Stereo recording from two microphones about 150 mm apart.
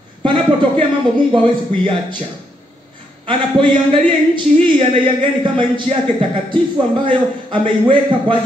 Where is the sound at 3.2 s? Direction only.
35° right (ahead or behind).